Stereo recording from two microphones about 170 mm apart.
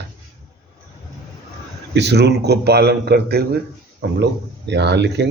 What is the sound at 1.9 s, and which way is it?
A man's voice, 80° right.